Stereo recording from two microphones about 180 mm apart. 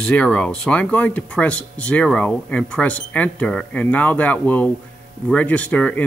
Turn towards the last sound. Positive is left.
turn(degrees=5)  # may be behind; listen again after turning